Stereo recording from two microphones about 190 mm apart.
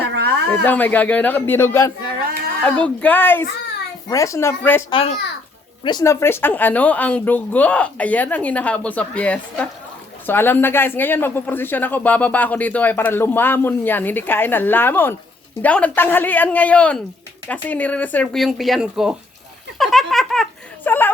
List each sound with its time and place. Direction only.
0.1 s a sound: 55° right (ahead or behind)
0.6 s speech: 10° left (ahead or behind)
4.9 s a child's voice: 30° left (ahead or behind); by 21.1 s 10° left (ahead or behind)